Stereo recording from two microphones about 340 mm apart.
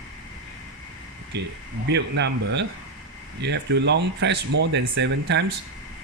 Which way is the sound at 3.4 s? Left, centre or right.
Right.